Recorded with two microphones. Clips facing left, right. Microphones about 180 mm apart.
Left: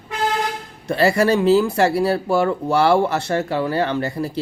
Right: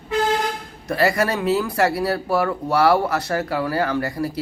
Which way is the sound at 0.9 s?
25° left (ahead or behind).